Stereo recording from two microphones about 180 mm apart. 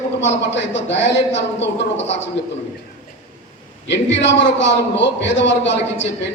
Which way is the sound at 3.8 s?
80° left.